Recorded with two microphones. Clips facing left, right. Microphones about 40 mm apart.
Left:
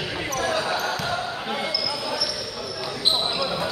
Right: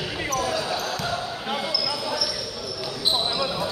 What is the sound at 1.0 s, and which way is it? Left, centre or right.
Basketball bounce, centre.